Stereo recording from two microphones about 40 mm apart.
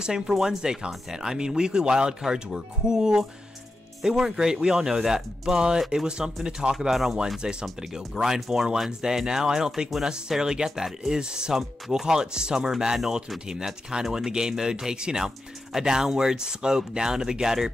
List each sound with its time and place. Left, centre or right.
0.3 s speech: centre
6.9 s speech: centre
7.4 s speech: centre